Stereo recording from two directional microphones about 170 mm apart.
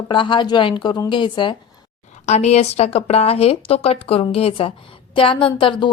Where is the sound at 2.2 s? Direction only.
40° left (ahead or behind).